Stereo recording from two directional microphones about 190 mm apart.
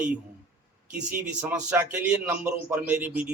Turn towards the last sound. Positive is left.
turn(degrees=-10)  # may be behind; listen again after turning